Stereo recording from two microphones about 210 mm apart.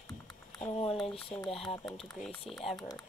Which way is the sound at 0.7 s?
30° left (ahead or behind).